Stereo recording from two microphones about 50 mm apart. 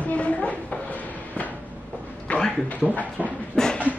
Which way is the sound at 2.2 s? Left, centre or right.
Left.